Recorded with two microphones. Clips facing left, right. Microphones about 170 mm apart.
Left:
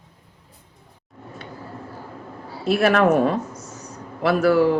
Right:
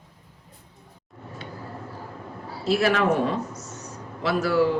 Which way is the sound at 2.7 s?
60° left (ahead or behind).